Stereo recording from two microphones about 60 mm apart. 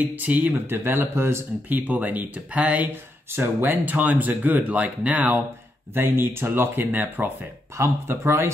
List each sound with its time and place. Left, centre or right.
0.1 s speech: right
0.7 s speech: right
1.7 s speech: right
3.3 s speech: right
5.9 s speech: right
7.8 s speech: right